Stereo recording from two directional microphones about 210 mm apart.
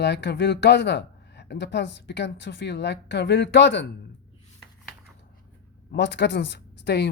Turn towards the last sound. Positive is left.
turn(degrees=55)  # may be behind; listen again after turning